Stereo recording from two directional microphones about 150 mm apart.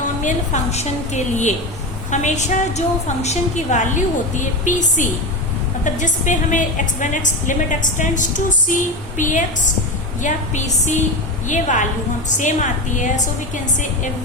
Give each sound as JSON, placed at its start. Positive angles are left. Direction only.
{"t": 0.2, "sound": "a woman's voice", "side_deg": 55}
{"t": 11.4, "sound": "a woman's voice", "side_deg": 55}